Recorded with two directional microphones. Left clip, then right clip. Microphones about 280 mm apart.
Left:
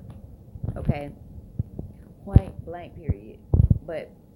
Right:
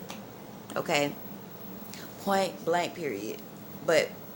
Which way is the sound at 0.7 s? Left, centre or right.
Centre.